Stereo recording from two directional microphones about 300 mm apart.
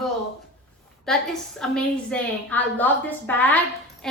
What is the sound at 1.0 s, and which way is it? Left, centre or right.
A woman's voice, centre.